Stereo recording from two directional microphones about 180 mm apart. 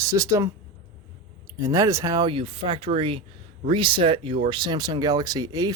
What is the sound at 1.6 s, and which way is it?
Speech, 15° right (ahead or behind).